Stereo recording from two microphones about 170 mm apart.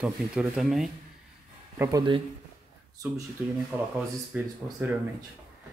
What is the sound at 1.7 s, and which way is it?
Speech, 15° right (ahead or behind).